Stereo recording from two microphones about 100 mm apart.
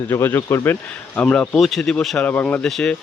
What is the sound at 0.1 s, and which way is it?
Speech, 25° left (ahead or behind).